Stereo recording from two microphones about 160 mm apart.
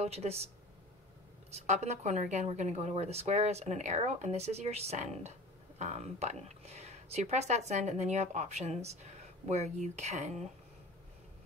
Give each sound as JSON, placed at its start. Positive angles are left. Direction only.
{"t": 0.0, "sound": "speech", "side_deg": -40}
{"t": 1.5, "sound": "speech", "side_deg": -45}